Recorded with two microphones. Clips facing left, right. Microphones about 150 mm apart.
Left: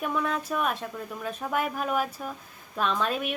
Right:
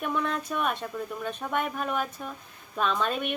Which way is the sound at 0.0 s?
Centre (ahead or behind).